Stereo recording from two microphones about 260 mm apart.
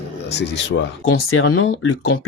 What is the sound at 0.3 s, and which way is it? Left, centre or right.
Speech, left.